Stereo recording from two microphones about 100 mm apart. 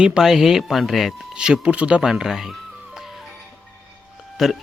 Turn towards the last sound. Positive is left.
turn(degrees=0)  # may be behind; listen again after turning